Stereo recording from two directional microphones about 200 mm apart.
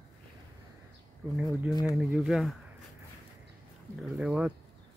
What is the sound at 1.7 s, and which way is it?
Speech, 20° left (ahead or behind).